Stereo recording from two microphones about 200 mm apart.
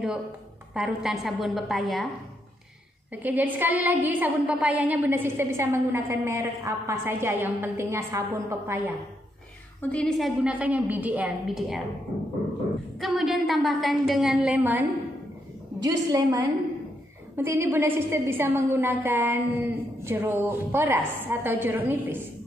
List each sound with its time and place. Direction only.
0.7 s a woman's voice: centre (ahead or behind)
3.1 s a woman's voice: 10° right (ahead or behind)
9.8 s a woman's voice: 5° left (ahead or behind)
13.0 s a woman's voice: centre (ahead or behind)